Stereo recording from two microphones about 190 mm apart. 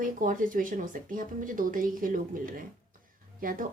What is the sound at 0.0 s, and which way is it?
Speech, 45° right (ahead or behind).